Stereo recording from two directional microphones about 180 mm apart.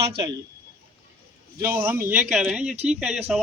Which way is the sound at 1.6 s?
10° right (ahead or behind).